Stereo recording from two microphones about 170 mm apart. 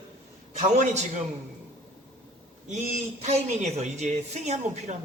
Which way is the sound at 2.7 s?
40° right (ahead or behind).